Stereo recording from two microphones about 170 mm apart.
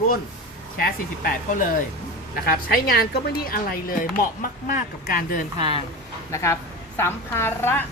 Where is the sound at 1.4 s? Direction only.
50° left (ahead or behind).